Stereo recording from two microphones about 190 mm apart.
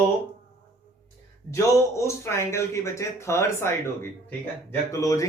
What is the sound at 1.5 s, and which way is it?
A man's voice, 15° left (ahead or behind).